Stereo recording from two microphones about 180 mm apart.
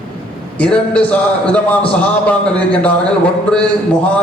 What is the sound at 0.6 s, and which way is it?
A man's voice, 5° left (ahead or behind).